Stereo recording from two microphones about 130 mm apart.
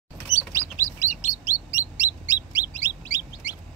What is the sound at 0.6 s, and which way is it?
Bird, 20° right (ahead or behind).